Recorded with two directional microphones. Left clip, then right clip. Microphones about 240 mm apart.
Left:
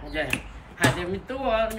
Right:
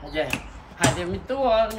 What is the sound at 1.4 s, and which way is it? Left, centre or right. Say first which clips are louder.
Speech: right 4 dB; right.